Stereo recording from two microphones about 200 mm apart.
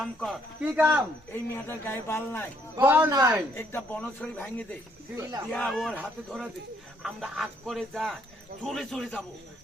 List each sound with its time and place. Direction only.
0.0 s speech: centre (ahead or behind)
1.3 s a man's voice: 10° left (ahead or behind)
2.7 s speech: 10° right (ahead or behind)
3.5 s a man's voice: 10° left (ahead or behind)